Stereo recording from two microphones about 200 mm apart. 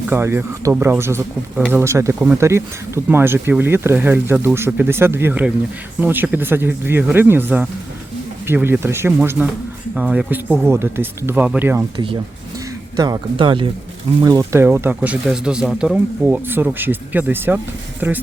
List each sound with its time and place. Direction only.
0.1 s speech: 10° right (ahead or behind)
13.0 s speech: 20° right (ahead or behind)